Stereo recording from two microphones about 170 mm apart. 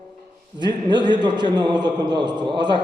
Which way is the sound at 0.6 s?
25° right (ahead or behind).